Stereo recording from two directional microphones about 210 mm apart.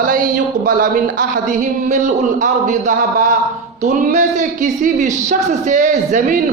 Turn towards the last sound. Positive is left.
turn(degrees=-35)  # may be behind; listen again after turning